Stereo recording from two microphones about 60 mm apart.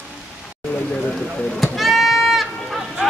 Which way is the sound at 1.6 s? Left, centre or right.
Centre.